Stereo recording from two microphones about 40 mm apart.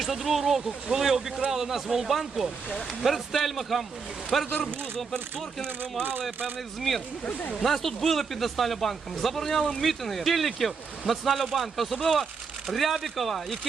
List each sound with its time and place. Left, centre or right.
0.0 s speech: centre
5.6 s speech: right
7.6 s speech: centre